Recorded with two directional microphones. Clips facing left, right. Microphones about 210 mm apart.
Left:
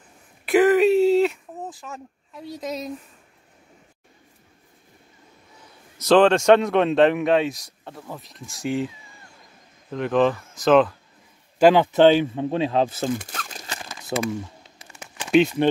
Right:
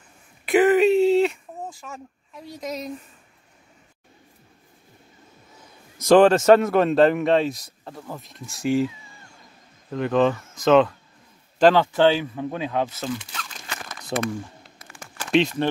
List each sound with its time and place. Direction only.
0.5 s a sound: centre (ahead or behind)
6.0 s speech: 10° right (ahead or behind)
9.8 s speech: centre (ahead or behind)
11.5 s speech: 10° left (ahead or behind); by 13.1 s 30° left (ahead or behind)
13.1 s crumpling: 50° left (ahead or behind)
14.0 s speech: 5° left (ahead or behind)